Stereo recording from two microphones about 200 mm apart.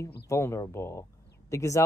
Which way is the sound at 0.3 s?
15° left (ahead or behind).